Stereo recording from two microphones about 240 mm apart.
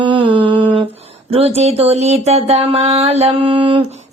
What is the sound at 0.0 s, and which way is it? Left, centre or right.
Mantra, right.